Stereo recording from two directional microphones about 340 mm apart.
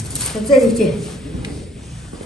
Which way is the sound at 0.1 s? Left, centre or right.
Centre.